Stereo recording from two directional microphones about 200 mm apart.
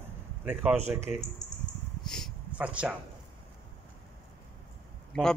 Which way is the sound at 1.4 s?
20° left (ahead or behind).